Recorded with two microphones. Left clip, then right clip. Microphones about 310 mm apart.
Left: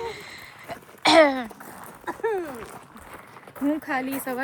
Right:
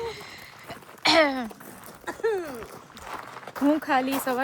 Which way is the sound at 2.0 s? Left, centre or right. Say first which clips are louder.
Even; left.